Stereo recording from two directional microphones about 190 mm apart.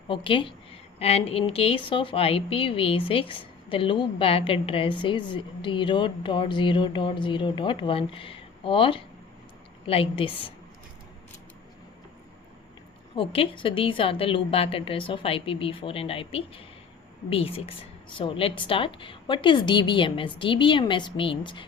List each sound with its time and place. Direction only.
0.1 s a woman's voice: 25° left (ahead or behind)
13.1 s a woman's voice: 30° left (ahead or behind)